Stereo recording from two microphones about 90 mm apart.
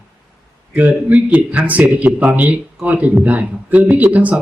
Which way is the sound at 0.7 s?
15° right (ahead or behind).